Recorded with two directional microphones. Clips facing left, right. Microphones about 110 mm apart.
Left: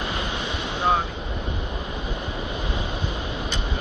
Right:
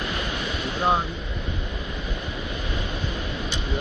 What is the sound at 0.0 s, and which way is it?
Waves, 25° left (ahead or behind).